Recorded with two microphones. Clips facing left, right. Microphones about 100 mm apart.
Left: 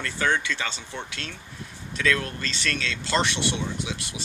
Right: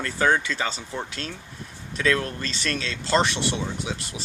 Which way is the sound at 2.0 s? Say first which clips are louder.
Right 2 dB; 30° right (ahead or behind).